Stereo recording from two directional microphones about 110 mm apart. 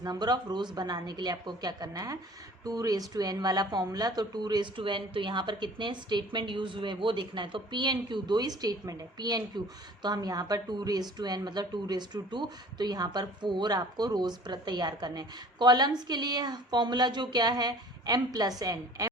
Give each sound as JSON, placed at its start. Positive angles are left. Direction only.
{"t": 0.0, "sound": "speech", "side_deg": -35}